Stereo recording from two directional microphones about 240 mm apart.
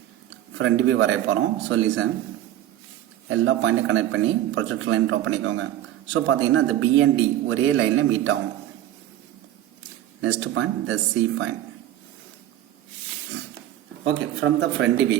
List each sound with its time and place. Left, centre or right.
0.6 s a man's voice: right
3.2 s a man's voice: right
10.2 s speech: right
14.0 s a man's voice: right